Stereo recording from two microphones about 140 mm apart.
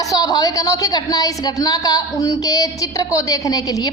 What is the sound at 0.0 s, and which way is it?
A woman's voice, 25° left (ahead or behind).